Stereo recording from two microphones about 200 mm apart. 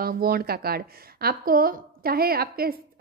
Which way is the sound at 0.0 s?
50° right (ahead or behind).